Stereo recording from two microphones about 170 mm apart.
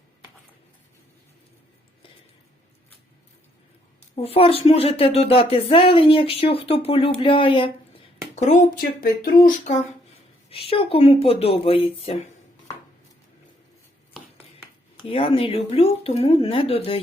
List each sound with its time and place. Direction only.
4.1 s speech: 35° left (ahead or behind)
8.4 s speech: 55° left (ahead or behind)
10.5 s speech: 35° left (ahead or behind)
15.0 s speech: 35° left (ahead or behind)